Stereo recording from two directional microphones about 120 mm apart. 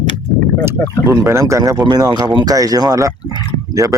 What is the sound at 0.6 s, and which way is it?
Speech, 20° right (ahead or behind).